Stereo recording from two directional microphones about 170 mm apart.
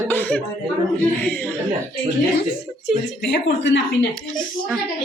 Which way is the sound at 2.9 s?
5° right (ahead or behind).